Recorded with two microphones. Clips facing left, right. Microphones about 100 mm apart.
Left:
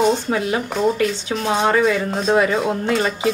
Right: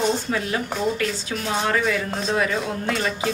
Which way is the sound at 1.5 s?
30° left (ahead or behind).